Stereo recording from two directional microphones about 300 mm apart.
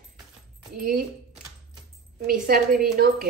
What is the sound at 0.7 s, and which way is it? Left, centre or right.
Speech, right.